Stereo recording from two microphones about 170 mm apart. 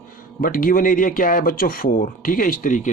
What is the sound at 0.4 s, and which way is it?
Speech, 55° left (ahead or behind).